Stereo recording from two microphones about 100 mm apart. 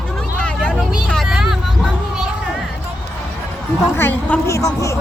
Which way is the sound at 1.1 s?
Centre (ahead or behind).